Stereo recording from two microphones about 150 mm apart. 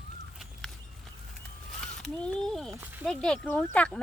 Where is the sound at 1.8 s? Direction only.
5° left (ahead or behind).